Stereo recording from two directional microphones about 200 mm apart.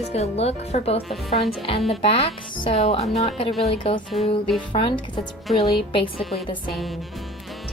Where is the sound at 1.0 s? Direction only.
Centre (ahead or behind).